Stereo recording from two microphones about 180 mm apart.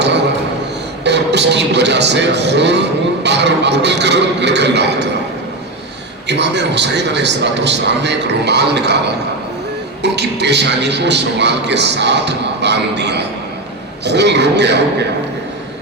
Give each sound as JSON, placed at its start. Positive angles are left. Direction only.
{"t": 1.0, "sound": "speech", "side_deg": -70}
{"t": 6.2, "sound": "speech", "side_deg": -70}